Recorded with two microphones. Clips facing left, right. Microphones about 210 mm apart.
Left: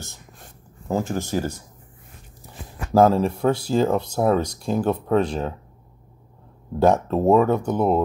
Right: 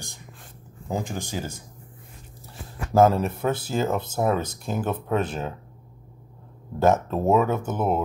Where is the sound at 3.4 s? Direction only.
5° right (ahead or behind).